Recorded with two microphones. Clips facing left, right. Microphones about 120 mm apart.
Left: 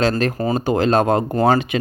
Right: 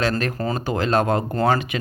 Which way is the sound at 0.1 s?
25° left (ahead or behind).